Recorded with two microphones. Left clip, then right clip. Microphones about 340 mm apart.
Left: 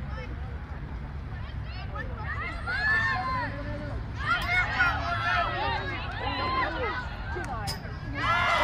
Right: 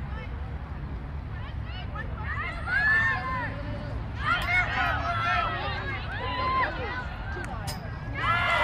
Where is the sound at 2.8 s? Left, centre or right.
Centre.